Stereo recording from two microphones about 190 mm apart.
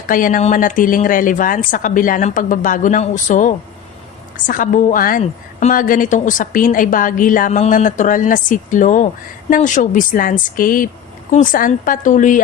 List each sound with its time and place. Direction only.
0.1 s a woman's voice: 45° left (ahead or behind)